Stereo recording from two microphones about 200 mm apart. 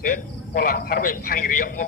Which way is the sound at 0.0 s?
45° left (ahead or behind).